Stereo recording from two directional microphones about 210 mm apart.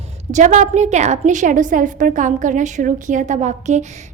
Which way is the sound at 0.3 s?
35° right (ahead or behind).